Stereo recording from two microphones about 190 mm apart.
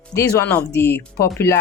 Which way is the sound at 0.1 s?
15° left (ahead or behind).